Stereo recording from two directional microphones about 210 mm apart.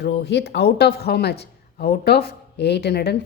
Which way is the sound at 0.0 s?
55° left (ahead or behind).